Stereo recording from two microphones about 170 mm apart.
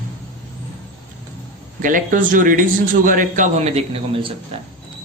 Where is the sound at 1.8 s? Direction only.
55° right (ahead or behind); by 4.7 s 35° right (ahead or behind).